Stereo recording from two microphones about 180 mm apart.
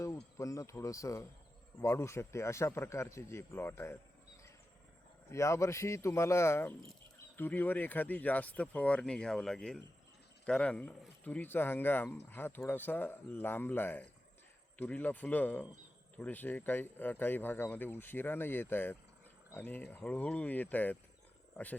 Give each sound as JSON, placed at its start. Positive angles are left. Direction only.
{"t": 0.3, "sound": "speech", "side_deg": 15}
{"t": 5.3, "sound": "speech", "side_deg": 15}